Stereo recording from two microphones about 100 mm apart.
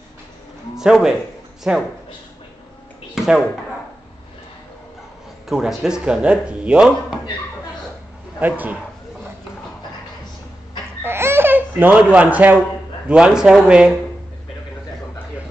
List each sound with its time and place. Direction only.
0.7 s a man's voice: 5° right (ahead or behind)
3.2 s a sound: 10° right (ahead or behind)
5.5 s speech: 5° right (ahead or behind)
8.4 s speech: 15° right (ahead or behind)
11.1 s a sound: 25° right (ahead or behind)
12.0 s speech: 10° right (ahead or behind)